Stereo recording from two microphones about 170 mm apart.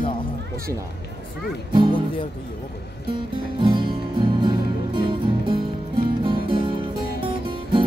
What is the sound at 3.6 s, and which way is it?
Music, 30° right (ahead or behind).